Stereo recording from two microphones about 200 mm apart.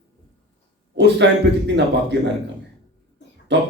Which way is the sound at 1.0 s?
60° right (ahead or behind).